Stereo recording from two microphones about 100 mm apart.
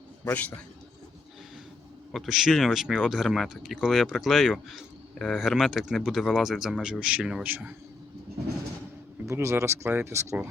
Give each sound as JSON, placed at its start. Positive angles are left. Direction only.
{"t": 2.1, "sound": "speech", "side_deg": 0}
{"t": 7.4, "sound": "a man's voice", "side_deg": -15}
{"t": 9.2, "sound": "speech", "side_deg": -30}